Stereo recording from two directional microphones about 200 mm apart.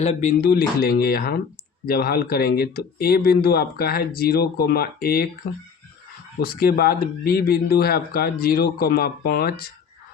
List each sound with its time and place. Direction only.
0.0 s speech: 35° left (ahead or behind)